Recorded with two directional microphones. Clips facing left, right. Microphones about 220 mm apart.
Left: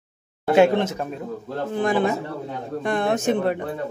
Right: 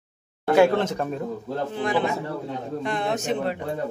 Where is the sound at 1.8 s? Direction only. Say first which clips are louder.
Left 4 dB; 50° left (ahead or behind).